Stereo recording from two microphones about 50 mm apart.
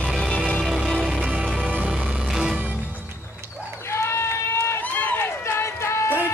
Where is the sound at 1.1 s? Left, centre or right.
Right.